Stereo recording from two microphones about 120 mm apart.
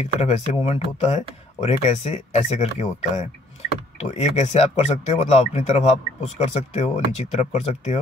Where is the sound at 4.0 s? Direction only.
70° left (ahead or behind).